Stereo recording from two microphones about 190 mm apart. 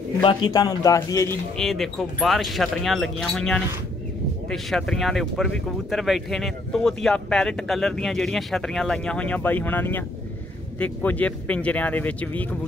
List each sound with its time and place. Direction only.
0.2 s a man's voice: 25° left (ahead or behind)
1.6 s speech: centre (ahead or behind)